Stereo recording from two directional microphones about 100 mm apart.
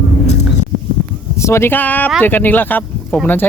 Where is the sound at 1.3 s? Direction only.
30° left (ahead or behind).